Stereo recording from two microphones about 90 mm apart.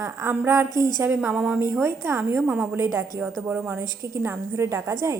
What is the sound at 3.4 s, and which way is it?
A woman's voice, 25° right (ahead or behind).